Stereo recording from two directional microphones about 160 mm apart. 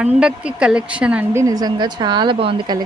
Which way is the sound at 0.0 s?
5° right (ahead or behind).